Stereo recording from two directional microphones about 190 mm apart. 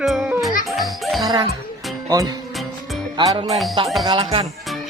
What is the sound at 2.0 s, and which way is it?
Speech, 20° right (ahead or behind).